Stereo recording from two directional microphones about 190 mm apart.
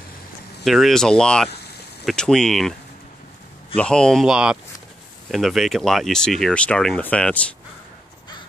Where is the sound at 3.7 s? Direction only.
5° left (ahead or behind).